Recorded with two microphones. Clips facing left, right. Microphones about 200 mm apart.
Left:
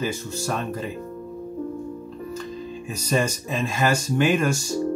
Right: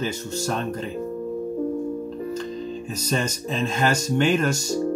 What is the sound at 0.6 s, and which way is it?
Speech, 5° left (ahead or behind).